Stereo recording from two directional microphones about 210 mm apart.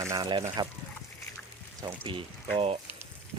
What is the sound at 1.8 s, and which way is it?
Speech, 20° right (ahead or behind).